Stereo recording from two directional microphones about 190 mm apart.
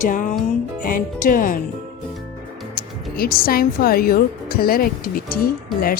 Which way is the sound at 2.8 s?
50° left (ahead or behind).